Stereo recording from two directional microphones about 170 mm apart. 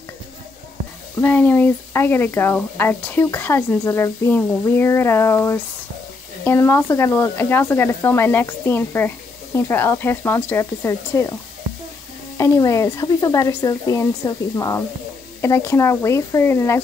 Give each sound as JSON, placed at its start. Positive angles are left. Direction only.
{"t": 1.2, "sound": "speech", "side_deg": 10}
{"t": 12.4, "sound": "speech", "side_deg": 20}